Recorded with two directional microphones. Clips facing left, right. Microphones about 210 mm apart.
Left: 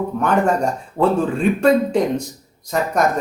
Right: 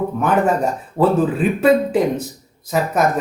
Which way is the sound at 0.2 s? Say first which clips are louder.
Even; 5° right (ahead or behind).